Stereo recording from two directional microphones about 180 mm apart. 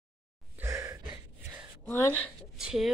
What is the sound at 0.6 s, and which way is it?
Gasp, 15° right (ahead or behind).